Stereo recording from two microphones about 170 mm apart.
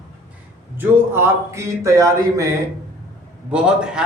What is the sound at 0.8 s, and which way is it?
A man's voice, 15° right (ahead or behind).